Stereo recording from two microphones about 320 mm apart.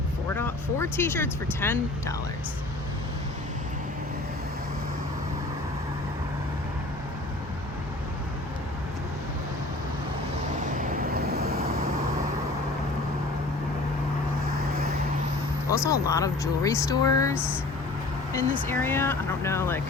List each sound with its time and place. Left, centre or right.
0.3 s speech: centre
10.8 s vehicle: right
15.7 s speech: centre
17.3 s speech: centre
18.7 s speech: centre